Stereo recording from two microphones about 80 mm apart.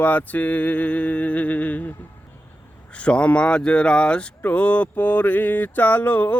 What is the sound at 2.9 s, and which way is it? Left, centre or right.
Speech, centre.